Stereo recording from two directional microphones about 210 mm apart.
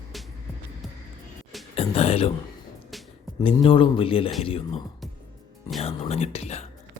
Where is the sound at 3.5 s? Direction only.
25° left (ahead or behind).